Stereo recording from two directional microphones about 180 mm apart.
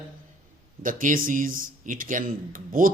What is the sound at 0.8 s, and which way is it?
A man's voice, 50° right (ahead or behind).